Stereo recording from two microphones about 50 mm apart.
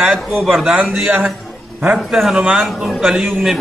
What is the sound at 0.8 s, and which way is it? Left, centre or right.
Speech, right.